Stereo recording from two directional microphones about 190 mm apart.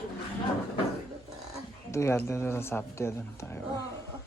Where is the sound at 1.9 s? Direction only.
15° left (ahead or behind).